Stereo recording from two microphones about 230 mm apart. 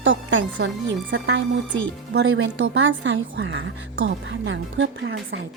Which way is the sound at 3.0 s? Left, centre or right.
Right.